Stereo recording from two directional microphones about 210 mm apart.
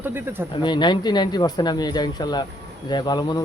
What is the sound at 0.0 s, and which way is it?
Speech, 10° right (ahead or behind).